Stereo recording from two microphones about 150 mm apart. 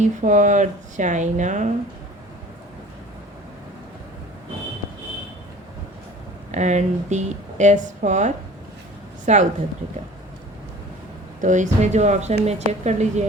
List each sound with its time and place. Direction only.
0.0 s speech: 55° right (ahead or behind)
6.5 s speech: 50° right (ahead or behind)
11.3 s speech: 55° right (ahead or behind)